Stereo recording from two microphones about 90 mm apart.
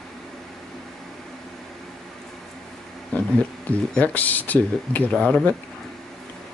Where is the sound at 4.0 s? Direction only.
20° left (ahead or behind).